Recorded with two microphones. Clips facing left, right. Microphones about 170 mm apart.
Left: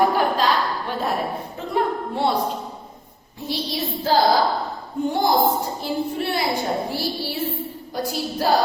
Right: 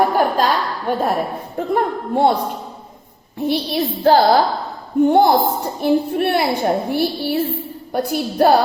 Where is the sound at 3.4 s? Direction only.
60° right (ahead or behind).